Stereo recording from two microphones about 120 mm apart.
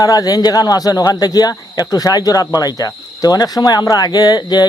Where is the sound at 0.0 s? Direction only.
30° left (ahead or behind).